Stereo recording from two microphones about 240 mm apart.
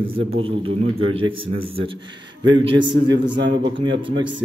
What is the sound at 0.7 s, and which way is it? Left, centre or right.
Speech, right.